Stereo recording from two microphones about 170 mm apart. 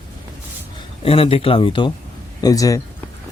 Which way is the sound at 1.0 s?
35° left (ahead or behind).